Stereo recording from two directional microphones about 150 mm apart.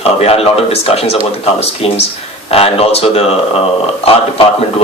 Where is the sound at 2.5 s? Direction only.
40° left (ahead or behind).